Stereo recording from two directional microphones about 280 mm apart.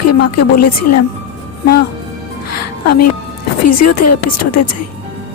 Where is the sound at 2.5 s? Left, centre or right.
Left.